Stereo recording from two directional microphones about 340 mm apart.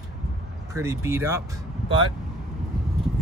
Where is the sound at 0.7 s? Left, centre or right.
Centre.